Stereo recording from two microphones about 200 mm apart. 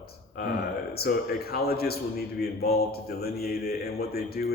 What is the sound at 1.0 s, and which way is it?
Speech, 50° left (ahead or behind).